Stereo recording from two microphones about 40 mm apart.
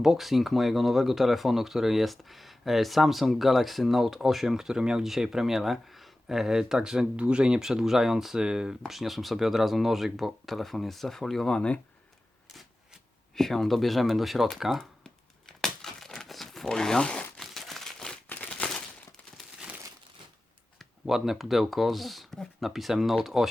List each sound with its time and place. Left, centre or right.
0.0 s speech: centre; by 7.6 s right
7.6 s speech: centre
8.9 s speech: centre
11.4 s speech: left
13.3 s speech: centre
15.0 s crumpling: centre
16.6 s speech: centre
17.4 s crumpling: centre
18.3 s a sound: left
21.1 s speech: centre